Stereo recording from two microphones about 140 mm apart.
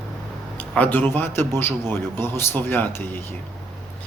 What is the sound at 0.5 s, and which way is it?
A man's voice, 10° left (ahead or behind).